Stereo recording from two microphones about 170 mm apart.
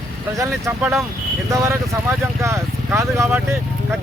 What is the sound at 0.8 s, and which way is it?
Speech, 5° right (ahead or behind).